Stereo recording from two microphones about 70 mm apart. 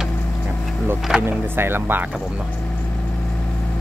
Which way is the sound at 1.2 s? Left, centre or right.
Right.